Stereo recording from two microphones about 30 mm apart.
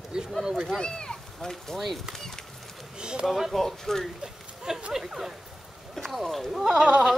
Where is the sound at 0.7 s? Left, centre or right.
Left.